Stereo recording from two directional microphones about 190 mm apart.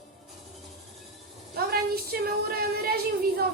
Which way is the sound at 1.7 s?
55° right (ahead or behind).